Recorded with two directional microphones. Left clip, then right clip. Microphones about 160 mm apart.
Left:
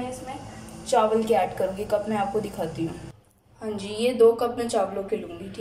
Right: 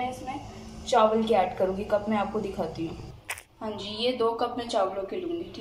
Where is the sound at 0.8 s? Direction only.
10° left (ahead or behind).